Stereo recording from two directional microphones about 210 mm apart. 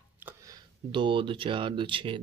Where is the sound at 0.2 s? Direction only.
10° right (ahead or behind).